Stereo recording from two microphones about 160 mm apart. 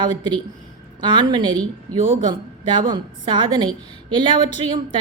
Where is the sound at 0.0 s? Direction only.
25° right (ahead or behind).